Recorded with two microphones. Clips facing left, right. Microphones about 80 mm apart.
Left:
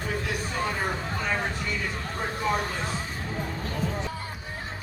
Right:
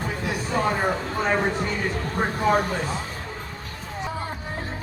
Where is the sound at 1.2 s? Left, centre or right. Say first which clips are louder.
Right 7 dB; right.